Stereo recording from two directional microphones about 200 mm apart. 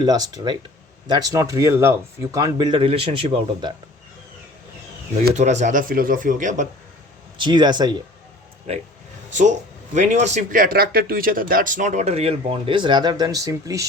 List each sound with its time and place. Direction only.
0.0 s speech: 20° right (ahead or behind)
5.3 s speech: 35° right (ahead or behind)
7.3 s speech: 20° right (ahead or behind)
8.7 s speech: 30° right (ahead or behind); by 13.8 s 15° right (ahead or behind)